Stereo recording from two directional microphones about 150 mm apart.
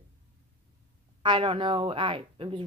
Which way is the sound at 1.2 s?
30° right (ahead or behind).